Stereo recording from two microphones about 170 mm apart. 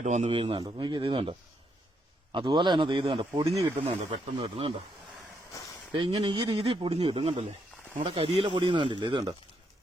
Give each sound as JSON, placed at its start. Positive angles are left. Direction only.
{"t": 0.0, "sound": "speech", "side_deg": -45}
{"t": 3.5, "sound": "speech", "side_deg": -20}
{"t": 3.8, "sound": "speech", "side_deg": -35}
{"t": 5.9, "sound": "speech", "side_deg": -30}